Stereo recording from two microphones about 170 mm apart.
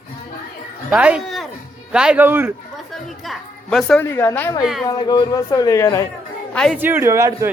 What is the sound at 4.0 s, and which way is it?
A woman's voice, 15° left (ahead or behind).